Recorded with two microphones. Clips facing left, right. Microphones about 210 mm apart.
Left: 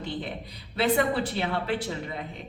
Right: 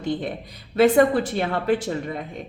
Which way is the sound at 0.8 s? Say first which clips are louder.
Right 8 dB; 45° right (ahead or behind).